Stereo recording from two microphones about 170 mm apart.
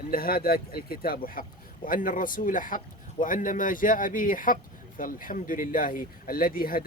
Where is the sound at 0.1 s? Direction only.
60° left (ahead or behind).